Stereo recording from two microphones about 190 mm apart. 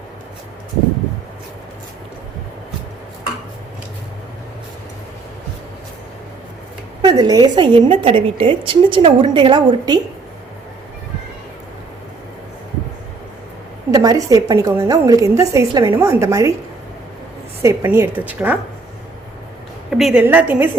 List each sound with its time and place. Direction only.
7.0 s a woman's voice: 20° right (ahead or behind)
13.9 s a woman's voice: 20° right (ahead or behind)
17.6 s a woman's voice: 15° right (ahead or behind)
19.9 s a woman's voice: centre (ahead or behind)